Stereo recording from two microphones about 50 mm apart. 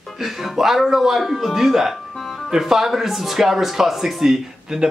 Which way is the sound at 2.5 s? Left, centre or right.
Centre.